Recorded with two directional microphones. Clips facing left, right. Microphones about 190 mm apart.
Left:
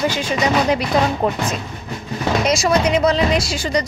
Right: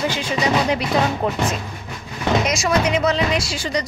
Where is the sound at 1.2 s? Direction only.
35° left (ahead or behind).